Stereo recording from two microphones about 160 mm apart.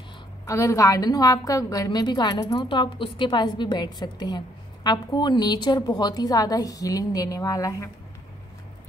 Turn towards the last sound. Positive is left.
turn(degrees=20)  # may be behind; listen again after turning